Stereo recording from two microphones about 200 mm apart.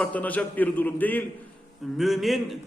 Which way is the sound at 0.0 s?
10° left (ahead or behind).